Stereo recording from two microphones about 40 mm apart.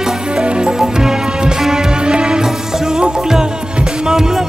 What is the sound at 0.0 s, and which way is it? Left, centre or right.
Music, right.